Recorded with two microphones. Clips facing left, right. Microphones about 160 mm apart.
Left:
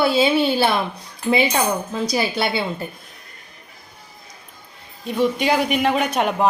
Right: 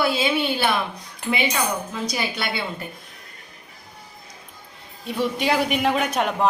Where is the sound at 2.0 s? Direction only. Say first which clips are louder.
Left 8 dB; 30° left (ahead or behind).